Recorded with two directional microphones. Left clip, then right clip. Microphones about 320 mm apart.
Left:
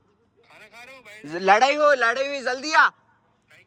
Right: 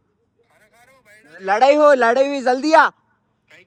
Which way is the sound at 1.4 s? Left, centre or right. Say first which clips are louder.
Right 4 dB; centre.